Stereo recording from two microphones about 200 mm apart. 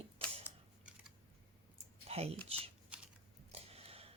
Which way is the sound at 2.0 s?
30° right (ahead or behind).